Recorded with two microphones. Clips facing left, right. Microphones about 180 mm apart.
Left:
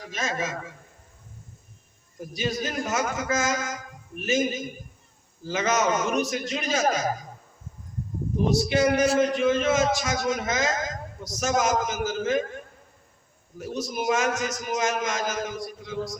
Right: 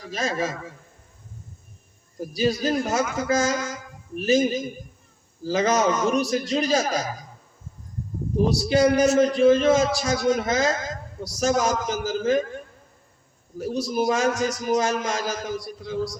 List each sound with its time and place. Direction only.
0.1 s a man's voice: 35° right (ahead or behind)
2.1 s a man's voice: 35° right (ahead or behind)
8.4 s a man's voice: 35° right (ahead or behind)
13.6 s a man's voice: 35° right (ahead or behind)